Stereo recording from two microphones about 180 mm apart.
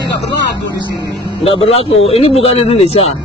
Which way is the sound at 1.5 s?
30° left (ahead or behind).